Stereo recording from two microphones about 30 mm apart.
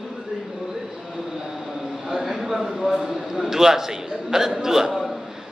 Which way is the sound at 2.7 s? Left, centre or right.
Centre.